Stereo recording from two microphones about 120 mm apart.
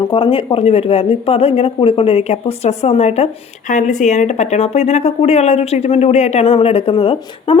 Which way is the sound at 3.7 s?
90° left.